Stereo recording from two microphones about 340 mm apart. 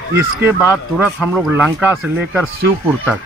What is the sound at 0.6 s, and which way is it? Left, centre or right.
Speech, centre.